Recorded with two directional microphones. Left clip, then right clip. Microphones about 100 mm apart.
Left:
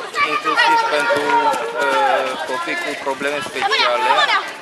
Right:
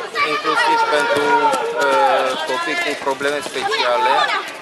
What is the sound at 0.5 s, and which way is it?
Speech, 10° left (ahead or behind).